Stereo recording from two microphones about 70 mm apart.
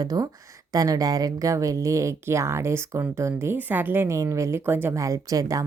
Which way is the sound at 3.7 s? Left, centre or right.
Right.